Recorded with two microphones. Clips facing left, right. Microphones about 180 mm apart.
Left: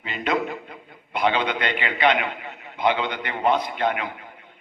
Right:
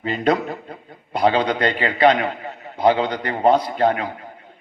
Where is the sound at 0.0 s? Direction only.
40° right (ahead or behind).